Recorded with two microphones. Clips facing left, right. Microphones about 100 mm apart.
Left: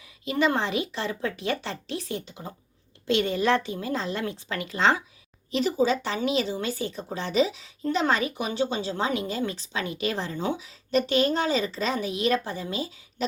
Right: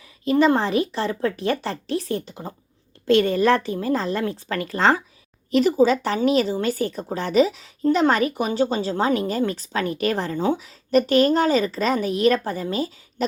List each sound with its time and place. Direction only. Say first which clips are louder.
0.0 s speech: right 7 dB; 40° right (ahead or behind)